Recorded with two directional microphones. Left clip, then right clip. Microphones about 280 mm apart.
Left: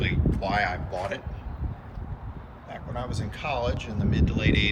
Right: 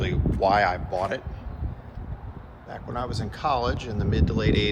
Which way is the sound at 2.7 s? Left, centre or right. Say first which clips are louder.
Right 3 dB; right.